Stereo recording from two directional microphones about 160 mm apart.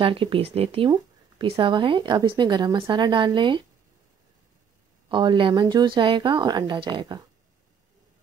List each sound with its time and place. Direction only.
0.0 s a woman's voice: 35° right (ahead or behind)
5.1 s a woman's voice: 30° right (ahead or behind)